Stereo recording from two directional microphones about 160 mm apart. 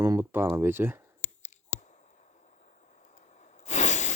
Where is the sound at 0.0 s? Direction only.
15° right (ahead or behind).